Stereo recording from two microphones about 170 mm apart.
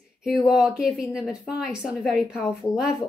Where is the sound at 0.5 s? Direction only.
5° right (ahead or behind).